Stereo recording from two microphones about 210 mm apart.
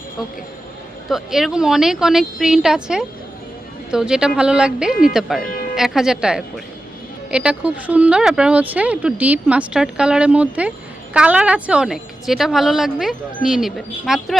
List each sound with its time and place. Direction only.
1.0 s speech: centre (ahead or behind)